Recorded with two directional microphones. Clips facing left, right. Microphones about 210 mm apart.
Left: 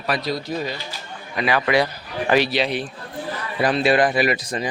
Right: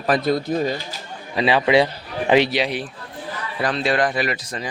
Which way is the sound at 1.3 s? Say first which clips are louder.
Right 3 dB; 25° right (ahead or behind).